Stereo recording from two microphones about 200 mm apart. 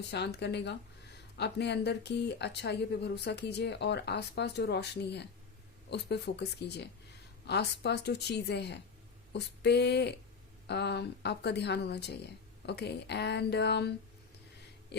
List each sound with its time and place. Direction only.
0.3 s speech: 60° left (ahead or behind)